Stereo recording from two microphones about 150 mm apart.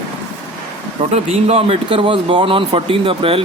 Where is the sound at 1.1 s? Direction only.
45° right (ahead or behind).